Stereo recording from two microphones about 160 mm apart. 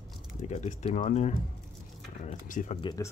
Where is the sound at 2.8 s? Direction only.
20° left (ahead or behind).